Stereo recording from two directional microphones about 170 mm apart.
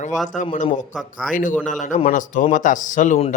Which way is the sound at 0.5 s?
45° left (ahead or behind).